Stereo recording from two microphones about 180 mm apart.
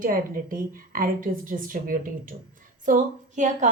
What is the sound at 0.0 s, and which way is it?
A woman's voice, 50° right (ahead or behind).